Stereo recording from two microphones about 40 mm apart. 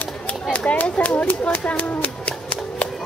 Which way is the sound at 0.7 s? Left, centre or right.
Left.